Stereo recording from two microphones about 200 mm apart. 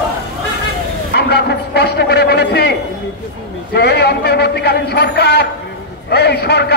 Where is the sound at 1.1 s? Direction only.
55° left (ahead or behind).